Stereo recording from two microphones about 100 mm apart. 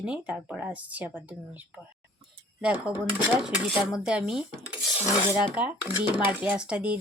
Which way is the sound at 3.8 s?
5° right (ahead or behind).